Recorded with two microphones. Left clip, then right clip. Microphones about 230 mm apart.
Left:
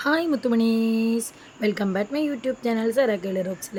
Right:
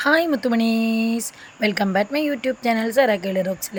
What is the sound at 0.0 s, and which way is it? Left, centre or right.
A woman's voice, centre.